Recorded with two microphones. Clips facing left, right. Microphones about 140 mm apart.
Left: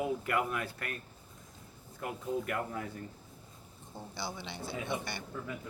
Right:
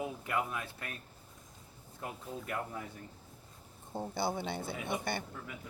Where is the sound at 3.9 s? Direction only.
50° right (ahead or behind).